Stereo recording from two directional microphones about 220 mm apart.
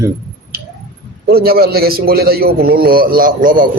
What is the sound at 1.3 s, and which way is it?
A man's voice, 45° right (ahead or behind).